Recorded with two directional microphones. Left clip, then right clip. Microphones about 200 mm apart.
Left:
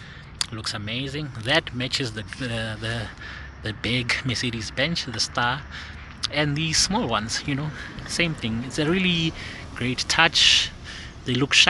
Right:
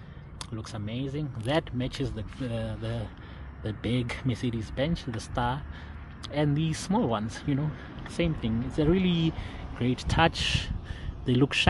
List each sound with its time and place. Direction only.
0.4 s speech: 15° right (ahead or behind)